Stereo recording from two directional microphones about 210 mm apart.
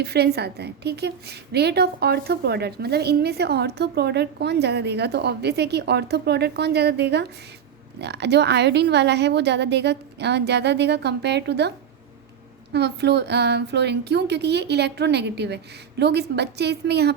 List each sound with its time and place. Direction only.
0.0 s a woman's voice: 50° right (ahead or behind)
12.7 s a woman's voice: 55° right (ahead or behind)